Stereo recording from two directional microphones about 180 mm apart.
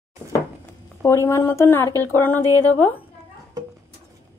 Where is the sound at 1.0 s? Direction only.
15° left (ahead or behind).